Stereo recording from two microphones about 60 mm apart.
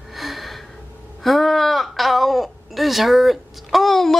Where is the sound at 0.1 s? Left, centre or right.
Centre.